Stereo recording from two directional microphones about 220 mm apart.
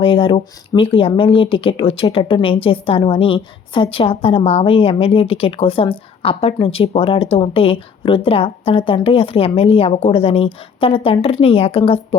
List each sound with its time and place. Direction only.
0.0 s speech: 25° left (ahead or behind)